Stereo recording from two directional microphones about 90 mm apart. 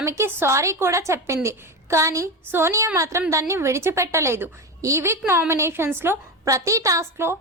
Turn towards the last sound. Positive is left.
turn(degrees=-30)  # may be behind; listen again after turning